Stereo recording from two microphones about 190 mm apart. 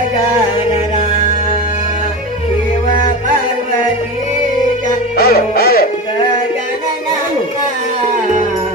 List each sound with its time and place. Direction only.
5.1 s music: 55° left (ahead or behind)